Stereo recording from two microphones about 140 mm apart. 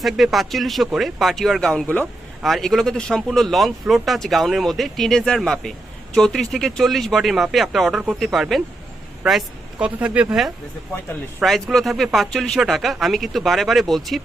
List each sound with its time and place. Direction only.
0.0 s speech: centre (ahead or behind)